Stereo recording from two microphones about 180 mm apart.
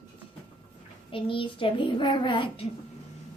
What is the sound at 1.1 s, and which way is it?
A child's voice, 30° left (ahead or behind).